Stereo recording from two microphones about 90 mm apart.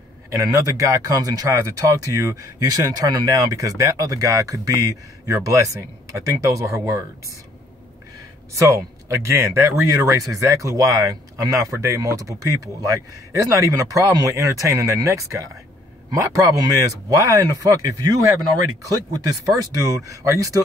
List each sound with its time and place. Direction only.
0.3 s speech: 40° right (ahead or behind)
8.5 s speech: 35° right (ahead or behind)